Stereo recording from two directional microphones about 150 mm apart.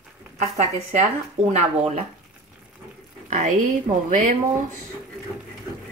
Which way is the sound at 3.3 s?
55° right (ahead or behind).